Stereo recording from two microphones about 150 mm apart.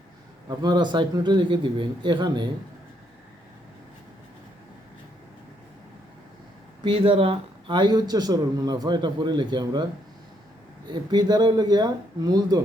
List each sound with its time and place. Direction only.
0.4 s a man's voice: 30° right (ahead or behind)
6.8 s speech: 35° right (ahead or behind)
11.1 s speech: 30° right (ahead or behind)